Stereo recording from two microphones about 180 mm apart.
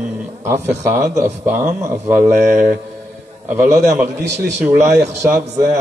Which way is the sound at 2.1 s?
55° right (ahead or behind).